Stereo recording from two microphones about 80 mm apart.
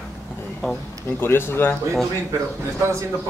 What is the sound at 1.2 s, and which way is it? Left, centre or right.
Speech, left.